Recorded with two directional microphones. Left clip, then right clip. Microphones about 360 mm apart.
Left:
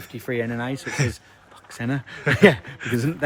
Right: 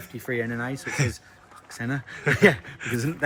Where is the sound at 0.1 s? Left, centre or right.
Left.